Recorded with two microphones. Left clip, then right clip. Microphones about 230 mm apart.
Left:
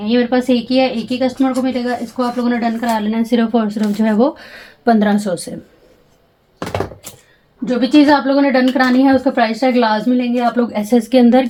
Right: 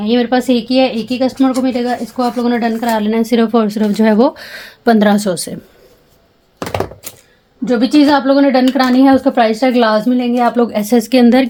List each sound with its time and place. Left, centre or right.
0.0 s speech: right
6.6 s typewriter: right
7.6 s speech: right